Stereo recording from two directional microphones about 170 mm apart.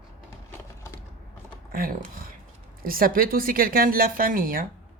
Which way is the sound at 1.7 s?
55° right (ahead or behind).